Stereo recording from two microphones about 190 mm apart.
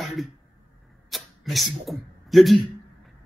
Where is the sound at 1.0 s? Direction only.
Centre (ahead or behind).